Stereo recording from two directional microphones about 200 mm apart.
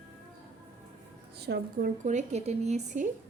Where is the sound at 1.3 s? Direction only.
55° right (ahead or behind); by 3.0 s 35° right (ahead or behind).